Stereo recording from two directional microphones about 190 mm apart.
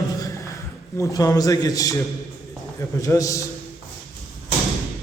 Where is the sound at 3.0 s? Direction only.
15° left (ahead or behind).